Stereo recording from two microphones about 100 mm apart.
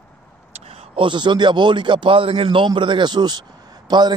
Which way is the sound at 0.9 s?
50° right (ahead or behind).